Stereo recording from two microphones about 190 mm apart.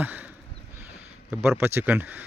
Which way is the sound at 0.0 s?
10° right (ahead or behind).